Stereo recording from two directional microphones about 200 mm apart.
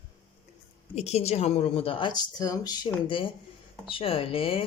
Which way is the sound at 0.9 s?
30° left (ahead or behind).